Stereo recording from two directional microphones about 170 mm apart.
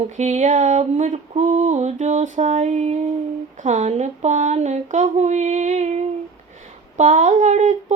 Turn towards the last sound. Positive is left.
turn(degrees=-45)  # may be behind; listen again after turning